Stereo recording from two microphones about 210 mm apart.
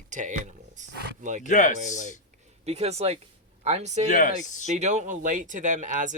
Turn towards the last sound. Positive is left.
turn(degrees=-35)  # may be behind; listen again after turning